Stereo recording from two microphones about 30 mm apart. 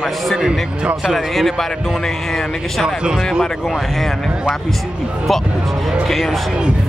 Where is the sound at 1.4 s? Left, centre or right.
Centre.